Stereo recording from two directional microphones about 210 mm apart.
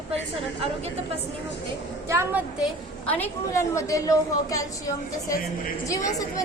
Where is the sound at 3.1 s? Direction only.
10° left (ahead or behind).